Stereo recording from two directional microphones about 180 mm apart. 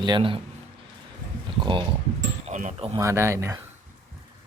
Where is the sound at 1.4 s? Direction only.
25° right (ahead or behind).